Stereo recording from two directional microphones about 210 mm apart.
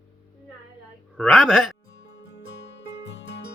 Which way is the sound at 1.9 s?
55° left (ahead or behind).